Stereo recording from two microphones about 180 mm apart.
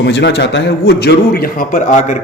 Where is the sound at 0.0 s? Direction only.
70° left (ahead or behind).